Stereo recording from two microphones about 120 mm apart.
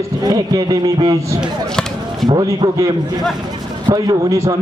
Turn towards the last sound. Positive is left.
turn(degrees=-25)  # may be behind; listen again after turning